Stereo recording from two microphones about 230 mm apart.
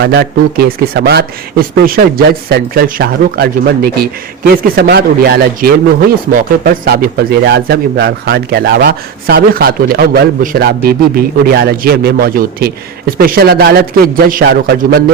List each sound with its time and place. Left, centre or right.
0.0 s speech: right
6.8 s speech: right